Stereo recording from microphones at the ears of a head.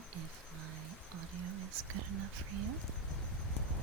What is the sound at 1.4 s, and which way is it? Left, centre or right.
Speech, right.